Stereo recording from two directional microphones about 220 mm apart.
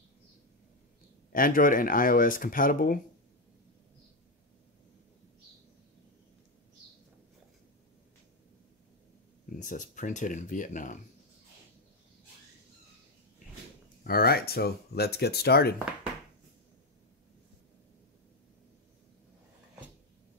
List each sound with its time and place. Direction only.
1.3 s speech: 40° left (ahead or behind)
9.6 s speech: 35° left (ahead or behind)
14.0 s speech: 45° left (ahead or behind)